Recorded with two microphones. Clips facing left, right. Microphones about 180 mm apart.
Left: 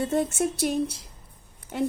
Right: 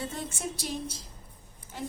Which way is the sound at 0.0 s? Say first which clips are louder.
Left 11 dB; 55° left (ahead or behind).